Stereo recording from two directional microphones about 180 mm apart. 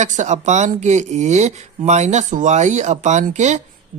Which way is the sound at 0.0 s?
40° right (ahead or behind).